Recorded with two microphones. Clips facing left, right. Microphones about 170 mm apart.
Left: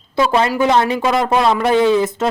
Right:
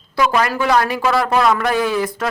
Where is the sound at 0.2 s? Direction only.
25° left (ahead or behind).